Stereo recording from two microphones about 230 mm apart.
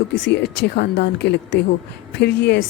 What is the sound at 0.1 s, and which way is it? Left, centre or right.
A woman's voice, left.